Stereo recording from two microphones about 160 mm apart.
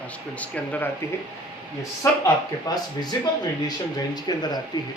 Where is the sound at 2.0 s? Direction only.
15° left (ahead or behind).